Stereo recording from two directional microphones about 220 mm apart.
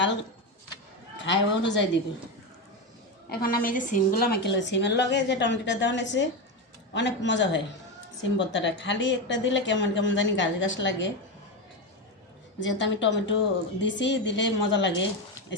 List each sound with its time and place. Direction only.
1.2 s a woman's voice: 55° left (ahead or behind)
3.2 s a woman's voice: 45° left (ahead or behind)
12.5 s a woman's voice: 55° left (ahead or behind)